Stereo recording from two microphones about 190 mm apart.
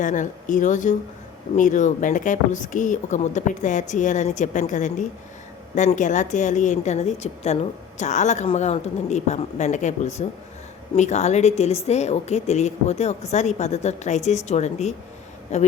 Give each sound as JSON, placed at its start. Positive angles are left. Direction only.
{"t": 0.0, "sound": "a woman's voice", "side_deg": 40}